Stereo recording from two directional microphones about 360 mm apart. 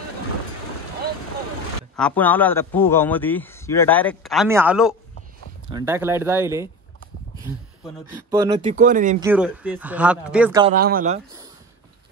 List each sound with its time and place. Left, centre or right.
2.0 s a man's voice: centre
8.3 s speech: centre
9.2 s a man's voice: centre
10.7 s speech: right